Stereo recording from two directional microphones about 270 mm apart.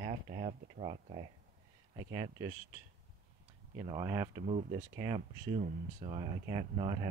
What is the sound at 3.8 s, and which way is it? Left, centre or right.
Speech, centre.